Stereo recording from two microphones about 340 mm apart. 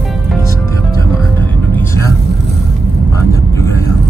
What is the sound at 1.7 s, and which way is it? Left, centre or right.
Vehicle, centre.